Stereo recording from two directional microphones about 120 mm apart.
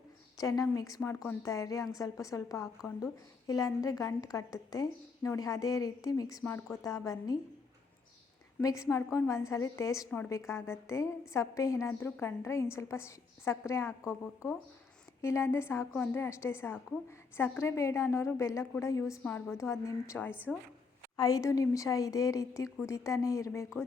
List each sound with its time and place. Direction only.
0.3 s a woman's voice: 30° left (ahead or behind)
6.4 s a woman's voice: 15° left (ahead or behind)
6.8 s a woman's voice: 30° left (ahead or behind)
8.6 s a woman's voice: 25° left (ahead or behind)
19.2 s a woman's voice: 15° left (ahead or behind)
19.5 s a woman's voice: 25° left (ahead or behind)
21.2 s a woman's voice: 30° left (ahead or behind)